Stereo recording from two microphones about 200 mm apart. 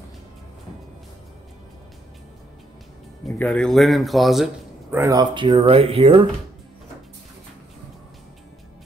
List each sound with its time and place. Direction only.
3.3 s speech: 5° left (ahead or behind)
4.9 s speech: 15° right (ahead or behind)